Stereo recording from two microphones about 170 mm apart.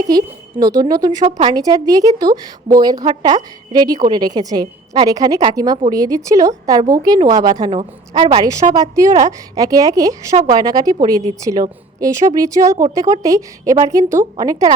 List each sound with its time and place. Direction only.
0.1 s a woman's voice: 25° right (ahead or behind)
8.4 s a woman's voice: 20° right (ahead or behind)